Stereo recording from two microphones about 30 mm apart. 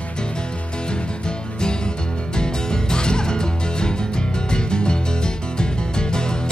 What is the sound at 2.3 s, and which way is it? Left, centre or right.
Music, left.